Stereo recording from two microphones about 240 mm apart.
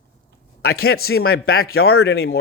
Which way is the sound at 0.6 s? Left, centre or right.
Left.